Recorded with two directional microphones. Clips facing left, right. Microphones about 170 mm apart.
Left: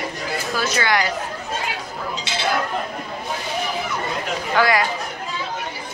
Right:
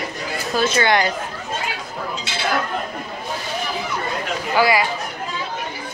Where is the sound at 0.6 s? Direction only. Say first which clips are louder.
Right 4 dB; 25° right (ahead or behind).